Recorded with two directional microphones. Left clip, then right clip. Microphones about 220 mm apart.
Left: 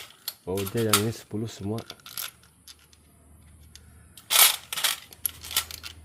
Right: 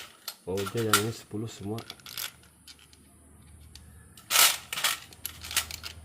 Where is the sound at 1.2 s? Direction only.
40° left (ahead or behind).